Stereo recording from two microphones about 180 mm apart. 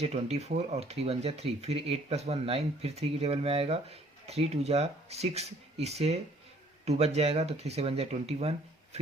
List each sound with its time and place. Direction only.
0.0 s speech: 35° right (ahead or behind)